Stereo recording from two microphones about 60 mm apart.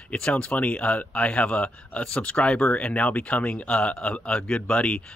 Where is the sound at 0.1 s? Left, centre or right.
Centre.